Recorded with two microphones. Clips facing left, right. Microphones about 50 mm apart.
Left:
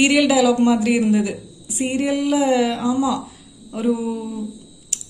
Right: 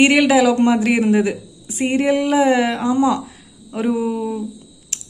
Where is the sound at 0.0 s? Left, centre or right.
Right.